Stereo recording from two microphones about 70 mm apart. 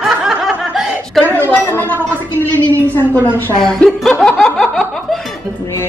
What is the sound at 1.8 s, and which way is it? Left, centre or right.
Speech, right.